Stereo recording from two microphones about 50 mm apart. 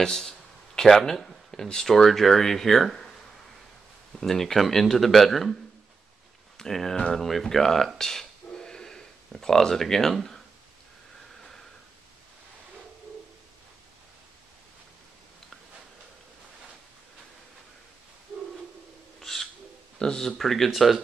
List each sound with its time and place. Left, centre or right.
0.0 s a sound: centre
0.8 s speech: centre
4.1 s speech: centre
8.0 s a sound: centre
19.2 s owl: centre
20.0 s speech: centre